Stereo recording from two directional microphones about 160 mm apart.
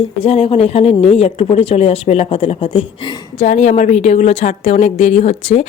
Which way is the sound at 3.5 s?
50° left (ahead or behind).